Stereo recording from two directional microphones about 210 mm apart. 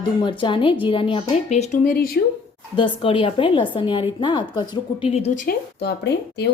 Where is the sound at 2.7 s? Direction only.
25° left (ahead or behind).